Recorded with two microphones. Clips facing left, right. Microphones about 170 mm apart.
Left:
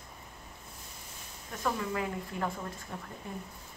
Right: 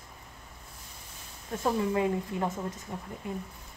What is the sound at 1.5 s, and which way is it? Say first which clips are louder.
Speech: right 5 dB; 25° right (ahead or behind).